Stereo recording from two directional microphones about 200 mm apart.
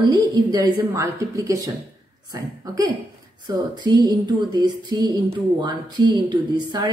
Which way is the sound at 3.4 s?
20° right (ahead or behind).